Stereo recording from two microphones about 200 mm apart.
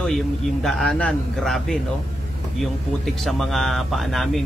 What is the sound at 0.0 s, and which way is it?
A man's voice, centre (ahead or behind).